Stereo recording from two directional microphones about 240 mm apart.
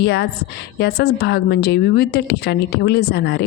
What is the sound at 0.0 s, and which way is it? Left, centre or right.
A woman's voice, left.